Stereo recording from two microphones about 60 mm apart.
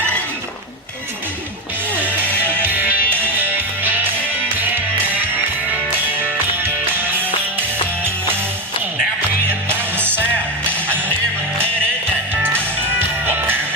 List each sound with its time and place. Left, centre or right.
2.2 s music: left
2.7 s music: right
9.6 s music: right
12.3 s music: right